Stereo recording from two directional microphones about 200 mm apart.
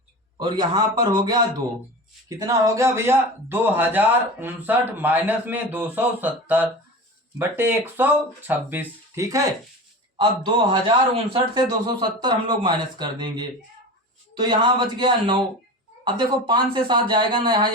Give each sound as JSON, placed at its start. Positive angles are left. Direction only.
{"t": 0.3, "sound": "speech", "side_deg": -20}
{"t": 2.5, "sound": "a man's voice", "side_deg": -15}